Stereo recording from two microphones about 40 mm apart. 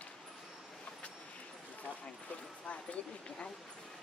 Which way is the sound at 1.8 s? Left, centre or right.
Left.